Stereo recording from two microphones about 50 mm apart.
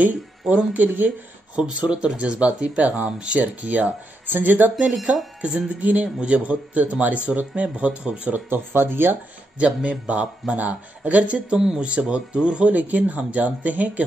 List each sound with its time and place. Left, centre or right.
0.7 s speech: right
1.8 s speech: centre
8.5 s speech: right
9.6 s speech: right
11.5 s speech: centre
12.7 s speech: right